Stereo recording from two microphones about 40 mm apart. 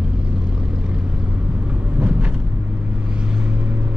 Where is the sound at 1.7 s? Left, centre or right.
Right.